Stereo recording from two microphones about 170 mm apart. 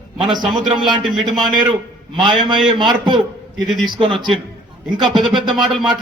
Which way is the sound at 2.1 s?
30° right (ahead or behind).